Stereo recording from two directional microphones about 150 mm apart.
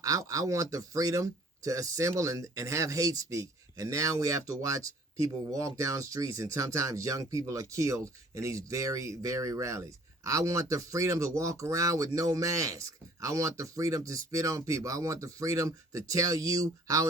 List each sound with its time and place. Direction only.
0.0 s speech: 20° right (ahead or behind)